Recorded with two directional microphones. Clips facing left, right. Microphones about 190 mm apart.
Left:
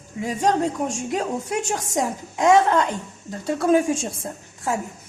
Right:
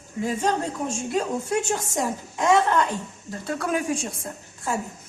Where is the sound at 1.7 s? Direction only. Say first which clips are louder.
Left 2 dB; 15° left (ahead or behind).